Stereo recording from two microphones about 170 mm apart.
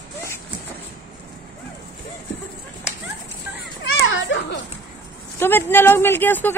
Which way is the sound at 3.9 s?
80° left.